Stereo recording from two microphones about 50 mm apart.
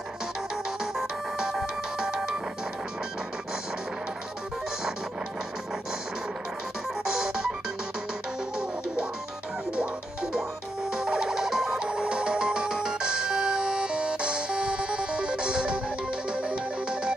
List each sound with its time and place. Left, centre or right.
0.9 s music: centre
7.1 s music: centre
9.8 s music: centre
11.9 s music: centre